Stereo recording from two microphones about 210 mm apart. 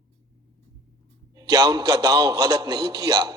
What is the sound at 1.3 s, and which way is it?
A man's voice, 15° right (ahead or behind).